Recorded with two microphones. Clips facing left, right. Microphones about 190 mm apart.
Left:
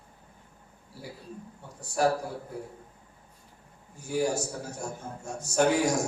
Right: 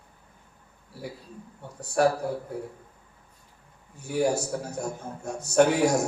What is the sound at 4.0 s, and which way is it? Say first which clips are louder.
A man's voice: right 3 dB; 60° right (ahead or behind).